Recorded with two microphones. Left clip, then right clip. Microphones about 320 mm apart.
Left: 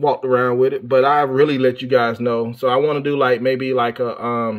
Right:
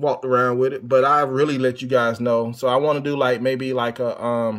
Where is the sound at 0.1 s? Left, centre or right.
Centre.